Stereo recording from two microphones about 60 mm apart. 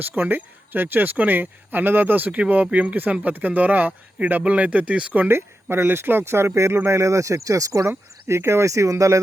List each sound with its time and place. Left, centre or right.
0.2 s speech: right
5.3 s speech: right
7.9 s speech: right